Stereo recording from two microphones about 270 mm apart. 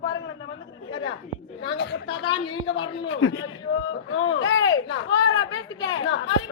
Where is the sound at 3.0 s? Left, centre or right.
Left.